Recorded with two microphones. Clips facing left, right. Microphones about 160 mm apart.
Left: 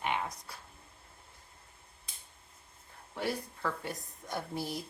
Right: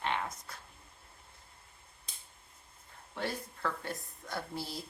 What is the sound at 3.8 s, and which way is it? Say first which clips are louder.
A woman's voice: even; 15° left (ahead or behind).